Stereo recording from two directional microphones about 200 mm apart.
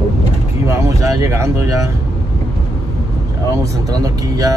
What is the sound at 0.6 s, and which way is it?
Speech, 15° right (ahead or behind).